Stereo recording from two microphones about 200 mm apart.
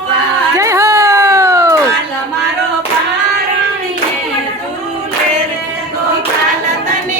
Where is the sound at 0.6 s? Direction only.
15° right (ahead or behind).